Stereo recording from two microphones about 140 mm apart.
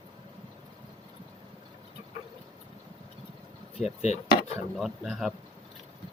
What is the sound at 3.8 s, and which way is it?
Speech, 55° left (ahead or behind).